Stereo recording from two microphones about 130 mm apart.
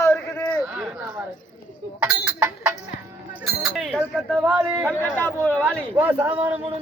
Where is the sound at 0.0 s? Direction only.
20° left (ahead or behind).